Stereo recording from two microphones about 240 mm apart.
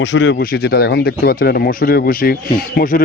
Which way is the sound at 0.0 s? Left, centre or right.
Left.